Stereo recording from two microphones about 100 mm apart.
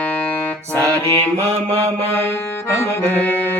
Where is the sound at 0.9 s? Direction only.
20° left (ahead or behind).